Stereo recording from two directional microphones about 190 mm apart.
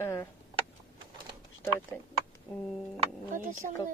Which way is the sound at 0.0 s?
15° left (ahead or behind).